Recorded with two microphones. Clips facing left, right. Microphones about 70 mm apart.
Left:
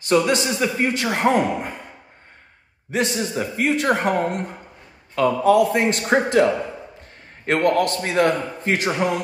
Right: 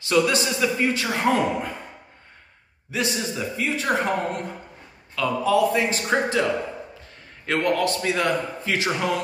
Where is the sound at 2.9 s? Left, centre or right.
Left.